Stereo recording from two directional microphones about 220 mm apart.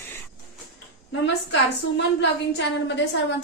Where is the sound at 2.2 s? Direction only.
55° left (ahead or behind).